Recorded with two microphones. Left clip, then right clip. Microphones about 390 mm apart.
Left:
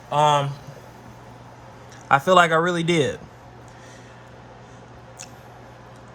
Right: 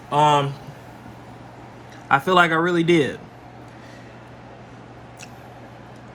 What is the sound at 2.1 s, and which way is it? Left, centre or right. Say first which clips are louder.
Speech: left 1 dB; centre.